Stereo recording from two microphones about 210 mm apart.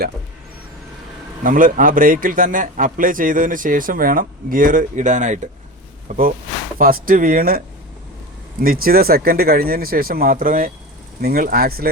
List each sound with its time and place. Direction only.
1.5 s a man's voice: 40° right (ahead or behind)
8.6 s speech: 45° right (ahead or behind)